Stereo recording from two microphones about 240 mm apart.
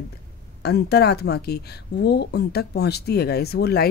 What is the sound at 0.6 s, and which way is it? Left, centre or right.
A woman's voice, left.